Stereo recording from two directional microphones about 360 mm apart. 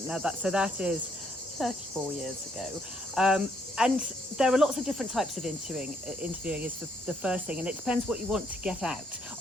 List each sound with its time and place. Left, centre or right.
0.1 s speech: centre
3.2 s speech: centre